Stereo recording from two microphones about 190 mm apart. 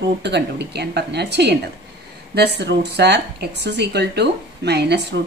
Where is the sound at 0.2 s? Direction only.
65° right (ahead or behind).